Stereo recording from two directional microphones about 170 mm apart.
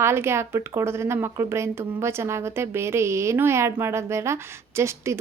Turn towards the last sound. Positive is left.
turn(degrees=-15)  # may be behind; listen again after turning